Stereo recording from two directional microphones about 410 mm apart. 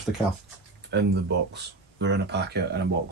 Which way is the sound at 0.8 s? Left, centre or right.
Right.